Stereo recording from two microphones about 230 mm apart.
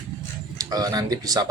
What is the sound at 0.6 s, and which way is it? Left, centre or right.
Speech, centre.